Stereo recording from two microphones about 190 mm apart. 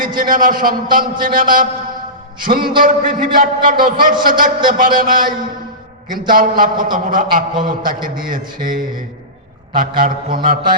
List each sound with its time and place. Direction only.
0.2 s a man's voice: 45° right (ahead or behind)